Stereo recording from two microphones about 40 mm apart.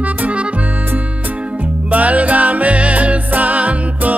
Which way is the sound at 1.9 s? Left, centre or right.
Right.